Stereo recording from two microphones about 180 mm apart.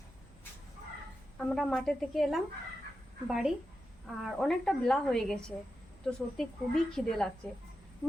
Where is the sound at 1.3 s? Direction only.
5° left (ahead or behind).